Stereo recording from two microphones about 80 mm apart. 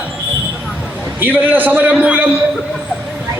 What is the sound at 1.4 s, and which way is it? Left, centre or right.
Speech, right.